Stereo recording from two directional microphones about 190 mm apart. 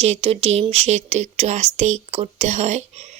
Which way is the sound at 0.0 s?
35° right (ahead or behind).